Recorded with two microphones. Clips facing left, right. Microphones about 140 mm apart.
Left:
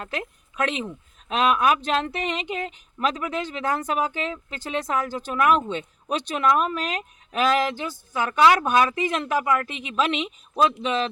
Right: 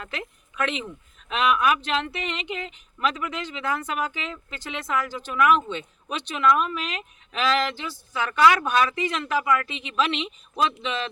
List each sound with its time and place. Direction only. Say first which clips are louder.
0.0 s a woman's voice: left 4 dB; 40° left (ahead or behind)
8.3 s speech: left 1 dB; 30° left (ahead or behind)
8.5 s a woman's voice: left 2 dB; 45° left (ahead or behind)